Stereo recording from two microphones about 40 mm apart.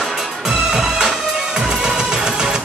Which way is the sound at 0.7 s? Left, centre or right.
Centre.